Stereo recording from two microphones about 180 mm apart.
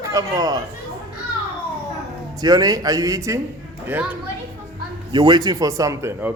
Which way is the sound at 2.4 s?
20° right (ahead or behind).